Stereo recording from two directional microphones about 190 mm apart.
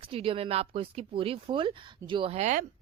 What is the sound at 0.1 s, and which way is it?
Speech, 30° right (ahead or behind).